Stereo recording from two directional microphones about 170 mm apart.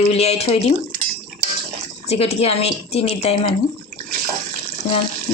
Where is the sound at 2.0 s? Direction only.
35° left (ahead or behind).